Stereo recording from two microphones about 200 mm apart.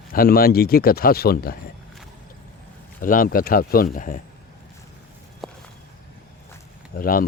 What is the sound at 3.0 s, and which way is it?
Speech, 45° left (ahead or behind).